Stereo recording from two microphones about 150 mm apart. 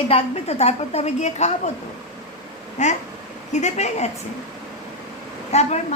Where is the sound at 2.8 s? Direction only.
50° left (ahead or behind).